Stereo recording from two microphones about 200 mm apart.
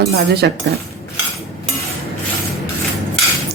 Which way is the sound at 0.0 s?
55° right (ahead or behind).